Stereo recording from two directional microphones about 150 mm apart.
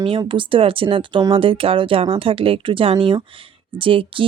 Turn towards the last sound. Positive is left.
turn(degrees=-35)  # may be behind; listen again after turning